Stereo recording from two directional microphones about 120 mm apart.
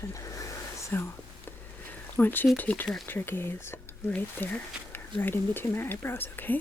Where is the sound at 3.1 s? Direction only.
15° left (ahead or behind).